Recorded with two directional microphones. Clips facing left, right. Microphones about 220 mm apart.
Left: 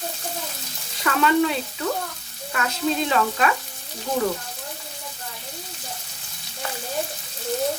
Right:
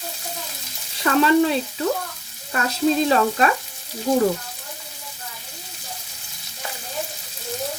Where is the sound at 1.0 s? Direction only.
35° right (ahead or behind).